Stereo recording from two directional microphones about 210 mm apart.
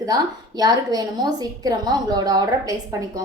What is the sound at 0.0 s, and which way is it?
A woman's voice, 20° right (ahead or behind).